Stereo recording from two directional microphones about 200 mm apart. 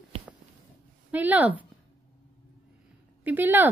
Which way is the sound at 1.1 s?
10° right (ahead or behind).